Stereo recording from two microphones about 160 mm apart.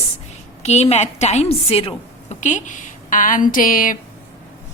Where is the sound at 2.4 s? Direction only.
50° left (ahead or behind).